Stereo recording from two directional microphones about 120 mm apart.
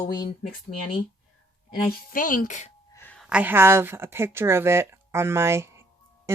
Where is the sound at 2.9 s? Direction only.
20° left (ahead or behind).